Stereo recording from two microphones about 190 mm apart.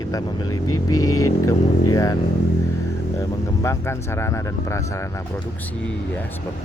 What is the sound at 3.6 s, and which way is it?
Speech, 15° left (ahead or behind).